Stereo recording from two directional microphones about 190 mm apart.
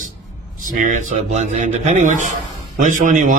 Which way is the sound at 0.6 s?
45° right (ahead or behind).